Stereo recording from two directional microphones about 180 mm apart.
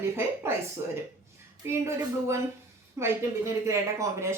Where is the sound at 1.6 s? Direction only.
15° right (ahead or behind).